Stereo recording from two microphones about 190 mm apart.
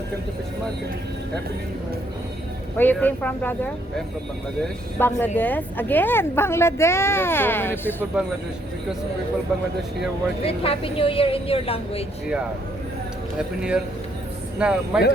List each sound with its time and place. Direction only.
2.7 s speech: 10° left (ahead or behind)
10.4 s a woman's voice: 30° left (ahead or behind)
13.6 s speech: 5° right (ahead or behind)